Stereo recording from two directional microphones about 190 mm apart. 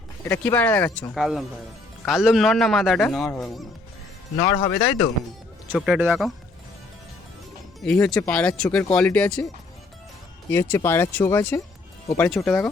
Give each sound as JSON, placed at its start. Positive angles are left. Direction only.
{"t": 0.3, "sound": "speech", "side_deg": 10}
{"t": 1.1, "sound": "a man's voice", "side_deg": 0}
{"t": 4.4, "sound": "speech", "side_deg": 30}
{"t": 5.7, "sound": "a man's voice", "side_deg": -5}
{"t": 7.8, "sound": "a man's voice", "side_deg": 5}
{"t": 10.5, "sound": "a man's voice", "side_deg": 15}